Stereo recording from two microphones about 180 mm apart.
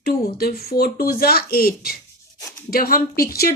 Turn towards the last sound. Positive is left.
turn(degrees=55)  # may be behind; listen again after turning